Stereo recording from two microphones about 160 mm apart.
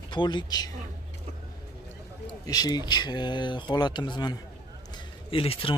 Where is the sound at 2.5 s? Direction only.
25° left (ahead or behind).